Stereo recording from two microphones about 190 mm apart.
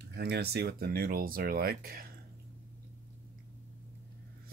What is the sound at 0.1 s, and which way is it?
Speech, 60° right (ahead or behind).